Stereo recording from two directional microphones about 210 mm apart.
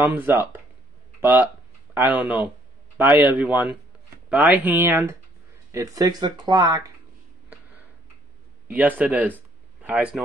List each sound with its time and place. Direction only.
0.0 s speech: 10° right (ahead or behind)
8.6 s speech: 10° right (ahead or behind)